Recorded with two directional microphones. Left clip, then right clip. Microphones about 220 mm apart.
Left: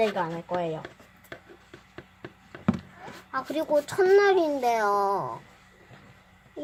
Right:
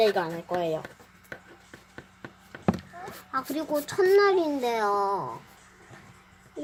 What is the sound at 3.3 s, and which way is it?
A child's voice, 5° left (ahead or behind).